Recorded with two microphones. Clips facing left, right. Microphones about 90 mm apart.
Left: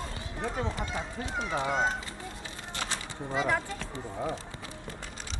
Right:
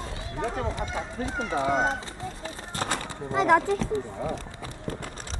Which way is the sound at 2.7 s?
50° right (ahead or behind).